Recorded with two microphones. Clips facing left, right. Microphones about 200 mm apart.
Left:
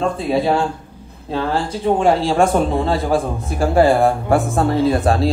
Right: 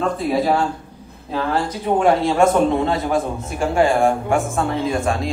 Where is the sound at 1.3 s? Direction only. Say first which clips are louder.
Left 1 dB; 30° left (ahead or behind).